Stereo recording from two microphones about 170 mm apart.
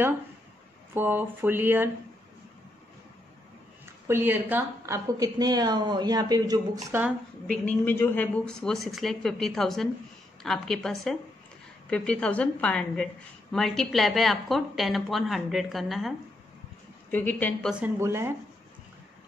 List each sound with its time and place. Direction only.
0.9 s speech: 10° right (ahead or behind)
4.1 s a woman's voice: 10° right (ahead or behind)
7.4 s a woman's voice: 10° left (ahead or behind)
17.1 s a woman's voice: 10° left (ahead or behind)
17.6 s speech: 10° right (ahead or behind)